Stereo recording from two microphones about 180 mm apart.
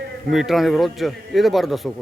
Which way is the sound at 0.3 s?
Centre (ahead or behind).